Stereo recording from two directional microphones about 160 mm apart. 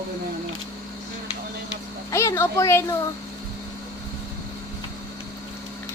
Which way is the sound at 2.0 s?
20° left (ahead or behind).